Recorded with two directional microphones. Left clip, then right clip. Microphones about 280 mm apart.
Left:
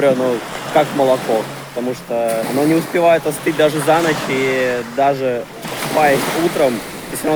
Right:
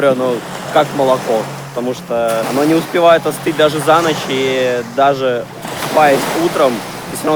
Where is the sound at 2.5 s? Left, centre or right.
Centre.